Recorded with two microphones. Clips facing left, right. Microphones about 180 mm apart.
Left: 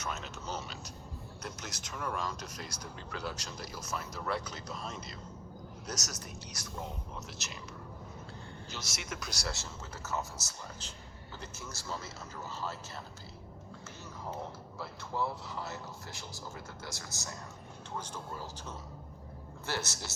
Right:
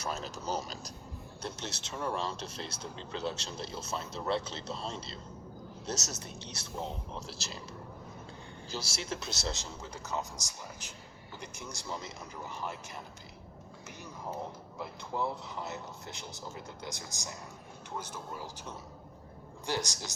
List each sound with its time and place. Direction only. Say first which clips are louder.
0.0 s a sound: right 3 dB; 35° right (ahead or behind)
1.4 s speech: right 4 dB; 30° right (ahead or behind)
8.7 s a man's voice: right 6 dB; 30° right (ahead or behind); by 12.7 s 15° right (ahead or behind)
14.8 s speech: right 1 dB; 20° right (ahead or behind)